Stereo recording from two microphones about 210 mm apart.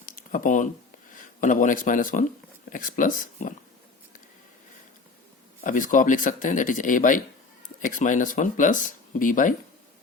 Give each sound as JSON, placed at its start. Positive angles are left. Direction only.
{"t": 0.0, "sound": "a sound", "side_deg": 40}
{"t": 1.1, "sound": "speech", "side_deg": 40}
{"t": 5.6, "sound": "speech", "side_deg": 40}